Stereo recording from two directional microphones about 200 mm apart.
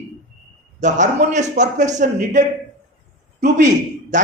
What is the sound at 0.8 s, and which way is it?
A man's voice, 35° right (ahead or behind).